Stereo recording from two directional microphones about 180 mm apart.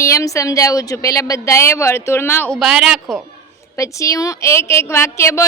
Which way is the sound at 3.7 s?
15° left (ahead or behind).